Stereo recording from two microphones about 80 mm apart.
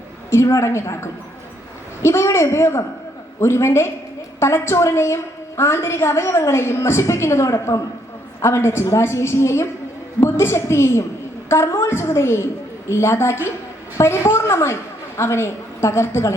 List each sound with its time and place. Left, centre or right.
0.3 s a woman's voice: left